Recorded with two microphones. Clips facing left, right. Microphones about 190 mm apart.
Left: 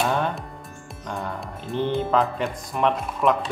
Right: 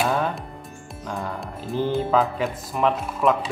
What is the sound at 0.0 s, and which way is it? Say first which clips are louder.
Music: right 1 dB; centre (ahead or behind).